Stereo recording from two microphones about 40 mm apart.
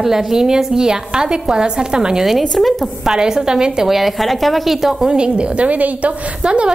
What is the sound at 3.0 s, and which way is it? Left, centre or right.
Speech, centre.